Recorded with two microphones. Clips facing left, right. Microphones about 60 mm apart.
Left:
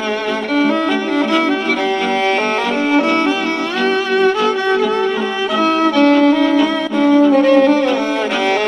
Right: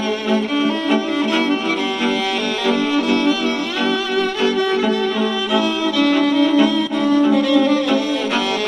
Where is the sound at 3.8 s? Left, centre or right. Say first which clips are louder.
Left 6 dB; left.